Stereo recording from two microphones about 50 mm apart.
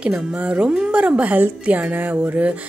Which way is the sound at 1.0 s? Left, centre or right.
Right.